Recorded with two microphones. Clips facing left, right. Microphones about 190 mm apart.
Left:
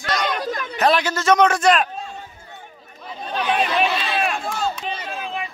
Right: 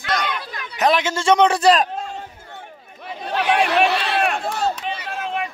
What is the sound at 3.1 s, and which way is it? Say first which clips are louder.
Chatter: right 3 dB; 70° right (ahead or behind).